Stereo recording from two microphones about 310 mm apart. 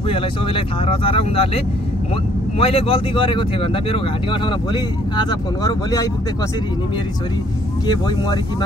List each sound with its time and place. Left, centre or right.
0.1 s speech: centre
2.6 s speech: centre
7.8 s speech: centre